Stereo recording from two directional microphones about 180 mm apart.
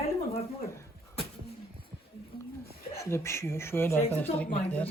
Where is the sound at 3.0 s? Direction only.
15° left (ahead or behind).